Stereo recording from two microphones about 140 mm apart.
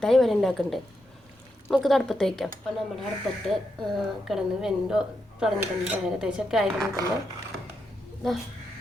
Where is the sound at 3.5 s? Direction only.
Centre (ahead or behind).